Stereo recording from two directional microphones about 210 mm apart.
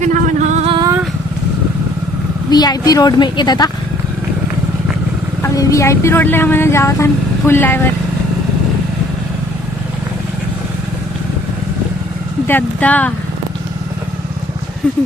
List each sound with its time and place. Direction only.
0.0 s music: 35° right (ahead or behind)
2.5 s a woman's voice: 20° left (ahead or behind)
5.4 s speech: 15° left (ahead or behind)
12.5 s speech: 10° left (ahead or behind)